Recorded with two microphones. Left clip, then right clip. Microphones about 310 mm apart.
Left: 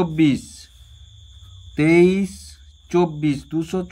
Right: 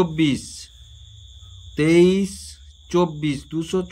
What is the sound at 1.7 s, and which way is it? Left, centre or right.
Speech, centre.